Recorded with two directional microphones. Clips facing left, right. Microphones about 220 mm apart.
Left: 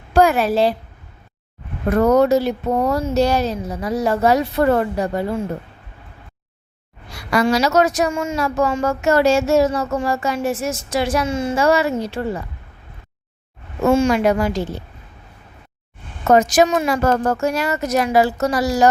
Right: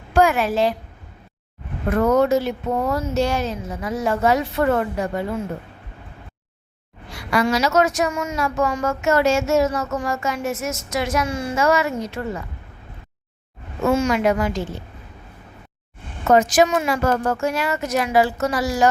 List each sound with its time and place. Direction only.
0.1 s a woman's voice: 35° left (ahead or behind)
1.9 s a woman's voice: 40° left (ahead or behind)
7.1 s a woman's voice: 40° left (ahead or behind)
13.8 s a woman's voice: 30° left (ahead or behind)
16.3 s a woman's voice: 40° left (ahead or behind)